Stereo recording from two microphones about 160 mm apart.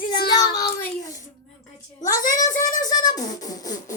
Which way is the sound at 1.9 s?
60° left (ahead or behind).